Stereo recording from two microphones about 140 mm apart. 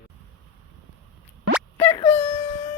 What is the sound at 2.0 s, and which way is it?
Wail, 45° left (ahead or behind).